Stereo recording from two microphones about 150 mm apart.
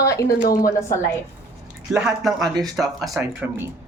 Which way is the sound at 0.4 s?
70° left (ahead or behind).